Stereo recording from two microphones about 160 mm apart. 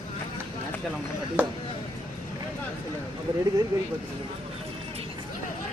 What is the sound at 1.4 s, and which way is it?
Speech, 10° right (ahead or behind).